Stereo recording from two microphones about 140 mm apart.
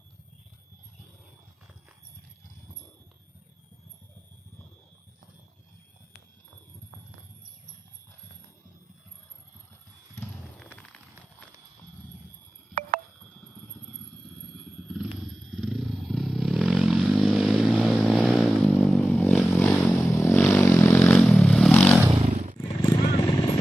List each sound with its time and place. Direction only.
10.6 s a sound: 10° left (ahead or behind)
15.5 s vehicle: centre (ahead or behind)
19.5 s vehicle: 15° left (ahead or behind)
21.2 s vehicle: centre (ahead or behind)
22.8 s vehicle: 30° left (ahead or behind)